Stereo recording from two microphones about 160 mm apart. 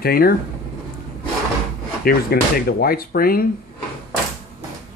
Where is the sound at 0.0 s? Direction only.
70° left (ahead or behind).